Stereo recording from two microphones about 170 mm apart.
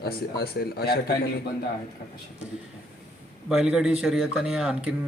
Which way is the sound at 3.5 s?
5° right (ahead or behind).